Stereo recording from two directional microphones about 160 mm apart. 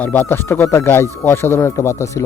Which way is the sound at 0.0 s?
10° left (ahead or behind).